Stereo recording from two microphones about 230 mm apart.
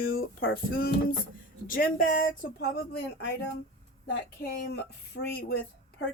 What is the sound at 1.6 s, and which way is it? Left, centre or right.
Speech, left.